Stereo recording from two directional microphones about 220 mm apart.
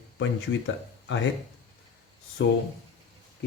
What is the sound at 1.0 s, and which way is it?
Speech, 55° left (ahead or behind).